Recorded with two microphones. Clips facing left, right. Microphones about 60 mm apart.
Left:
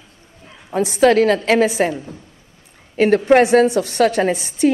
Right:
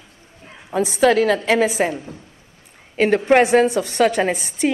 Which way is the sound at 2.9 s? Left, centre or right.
Left.